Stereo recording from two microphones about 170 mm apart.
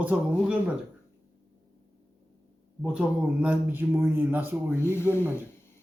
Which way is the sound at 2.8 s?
5° right (ahead or behind).